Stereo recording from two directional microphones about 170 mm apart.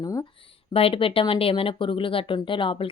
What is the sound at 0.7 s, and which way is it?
Speech, 35° left (ahead or behind).